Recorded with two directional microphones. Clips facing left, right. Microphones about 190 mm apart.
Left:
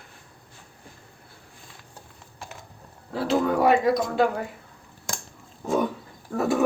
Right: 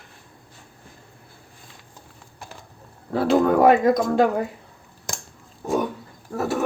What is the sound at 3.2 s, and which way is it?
Speech, 55° right (ahead or behind).